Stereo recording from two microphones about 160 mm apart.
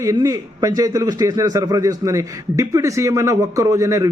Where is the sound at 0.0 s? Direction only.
20° right (ahead or behind).